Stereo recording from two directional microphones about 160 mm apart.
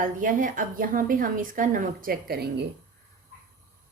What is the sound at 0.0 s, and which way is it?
A woman's voice, 55° right (ahead or behind).